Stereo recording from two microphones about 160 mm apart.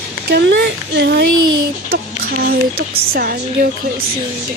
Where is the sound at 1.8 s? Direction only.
70° right (ahead or behind).